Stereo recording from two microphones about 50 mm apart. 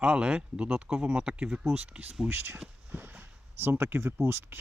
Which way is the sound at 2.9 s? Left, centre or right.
Right.